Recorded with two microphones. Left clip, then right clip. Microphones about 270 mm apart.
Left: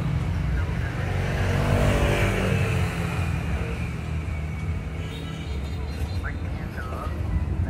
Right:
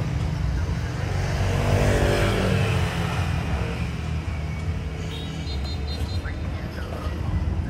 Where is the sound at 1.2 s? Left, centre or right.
Right.